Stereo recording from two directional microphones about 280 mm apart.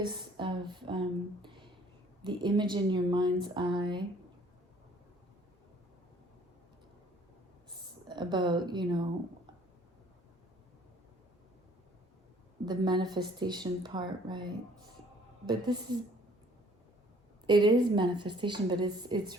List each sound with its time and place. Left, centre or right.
0.0 s a woman's voice: centre
7.7 s speech: centre
12.6 s a woman's voice: centre
17.4 s a woman's voice: centre